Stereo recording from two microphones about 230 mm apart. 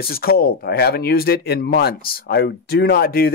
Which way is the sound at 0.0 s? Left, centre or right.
Left.